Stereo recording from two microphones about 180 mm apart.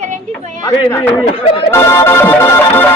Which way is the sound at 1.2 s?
30° left (ahead or behind).